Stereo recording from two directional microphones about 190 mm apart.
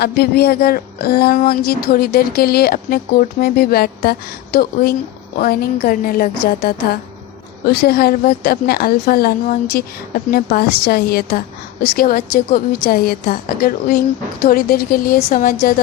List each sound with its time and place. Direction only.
0.0 s a woman's voice: 55° left (ahead or behind)